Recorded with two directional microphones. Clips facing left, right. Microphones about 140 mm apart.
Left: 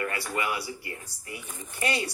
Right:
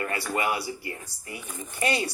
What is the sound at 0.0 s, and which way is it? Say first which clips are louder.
Speech: right 2 dB; 30° right (ahead or behind).